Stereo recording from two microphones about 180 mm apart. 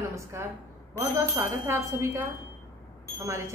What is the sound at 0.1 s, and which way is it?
A woman's voice, 15° right (ahead or behind).